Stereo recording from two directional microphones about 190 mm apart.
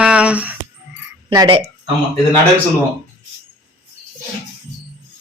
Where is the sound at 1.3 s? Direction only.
25° right (ahead or behind).